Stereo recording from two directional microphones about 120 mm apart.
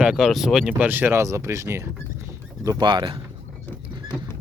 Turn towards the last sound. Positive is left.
turn(degrees=-40)  # may be behind; listen again after turning